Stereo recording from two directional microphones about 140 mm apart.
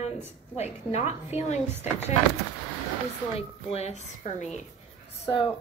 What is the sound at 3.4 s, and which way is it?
A woman's voice, 45° left (ahead or behind).